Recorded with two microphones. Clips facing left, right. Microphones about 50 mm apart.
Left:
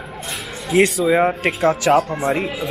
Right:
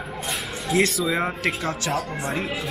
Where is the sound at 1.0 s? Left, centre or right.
Centre.